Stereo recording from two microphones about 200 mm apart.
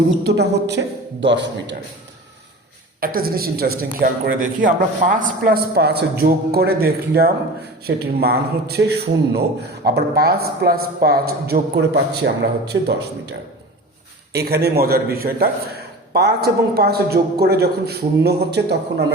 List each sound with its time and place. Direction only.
0.3 s a woman's voice: 55° right (ahead or behind)
3.0 s speech: 45° right (ahead or behind)
12.7 s a woman's voice: 65° right (ahead or behind)
14.3 s speech: 55° right (ahead or behind)